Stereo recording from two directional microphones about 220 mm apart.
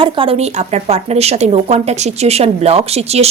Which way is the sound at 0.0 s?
25° right (ahead or behind).